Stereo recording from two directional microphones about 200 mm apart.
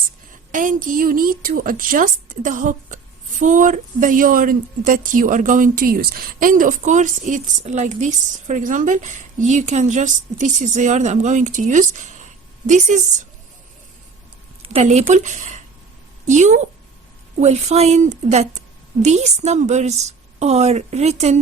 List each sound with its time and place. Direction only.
0.5 s a woman's voice: 40° right (ahead or behind)
14.7 s a woman's voice: 35° right (ahead or behind)